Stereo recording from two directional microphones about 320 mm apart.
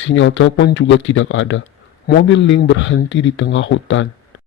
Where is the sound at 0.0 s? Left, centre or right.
Left.